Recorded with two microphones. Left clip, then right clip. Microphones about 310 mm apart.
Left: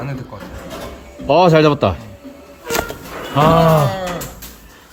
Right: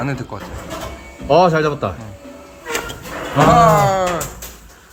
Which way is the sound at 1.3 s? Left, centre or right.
Left.